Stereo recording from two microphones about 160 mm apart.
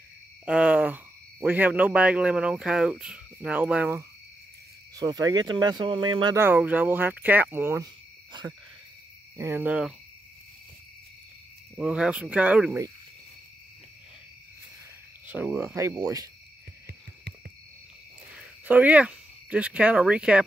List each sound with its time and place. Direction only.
0.5 s speech: 5° right (ahead or behind)
4.9 s speech: 25° right (ahead or behind)
6.3 s speech: 10° right (ahead or behind)
9.4 s speech: 10° right (ahead or behind)
11.7 s speech: 5° right (ahead or behind)
15.2 s speech: 10° right (ahead or behind)
15.7 s speech: 20° right (ahead or behind)
18.7 s speech: 10° right (ahead or behind)